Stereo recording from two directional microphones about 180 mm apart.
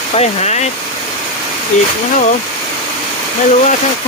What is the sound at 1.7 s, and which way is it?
Speech, 45° left (ahead or behind).